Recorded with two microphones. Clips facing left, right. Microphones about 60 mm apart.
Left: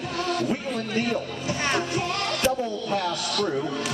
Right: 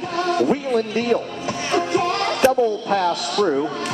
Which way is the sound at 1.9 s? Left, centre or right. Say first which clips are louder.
Right 7 dB; right.